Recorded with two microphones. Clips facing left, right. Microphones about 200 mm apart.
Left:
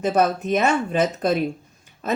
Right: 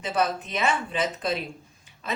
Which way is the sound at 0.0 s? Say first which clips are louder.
Left 7 dB; 45° left (ahead or behind).